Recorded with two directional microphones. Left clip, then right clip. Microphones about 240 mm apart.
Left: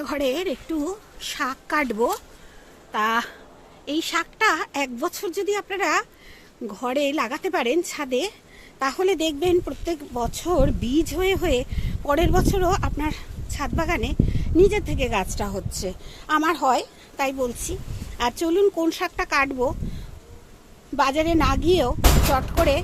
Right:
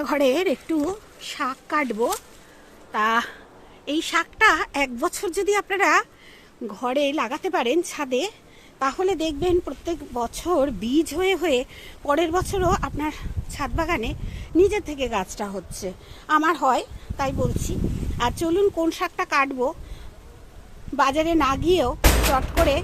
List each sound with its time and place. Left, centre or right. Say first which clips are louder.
0.0 s speech: right 4 dB; centre
1.2 s speech: left 1 dB; centre
20.9 s speech: even; centre